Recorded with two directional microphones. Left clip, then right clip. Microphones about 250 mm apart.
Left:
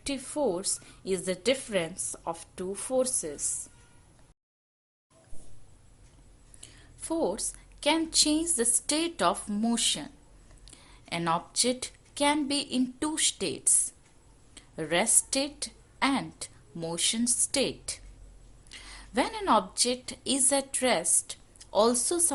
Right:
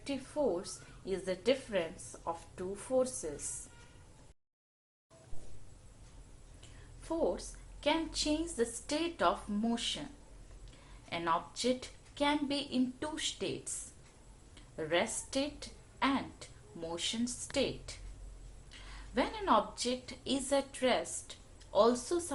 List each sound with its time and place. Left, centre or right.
0.0 s a woman's voice: left
6.6 s a woman's voice: left
11.1 s a woman's voice: left
14.5 s a woman's voice: left